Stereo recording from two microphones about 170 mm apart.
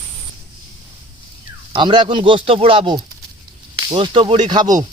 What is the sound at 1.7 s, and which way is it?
Speech, 25° right (ahead or behind).